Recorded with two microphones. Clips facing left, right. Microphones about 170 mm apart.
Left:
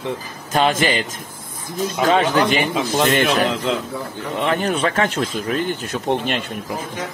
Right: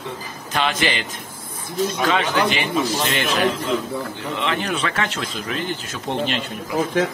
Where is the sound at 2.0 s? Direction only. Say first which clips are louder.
Left 6 dB; 45° left (ahead or behind).